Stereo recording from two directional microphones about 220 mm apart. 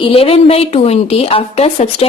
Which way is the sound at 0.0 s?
25° left (ahead or behind).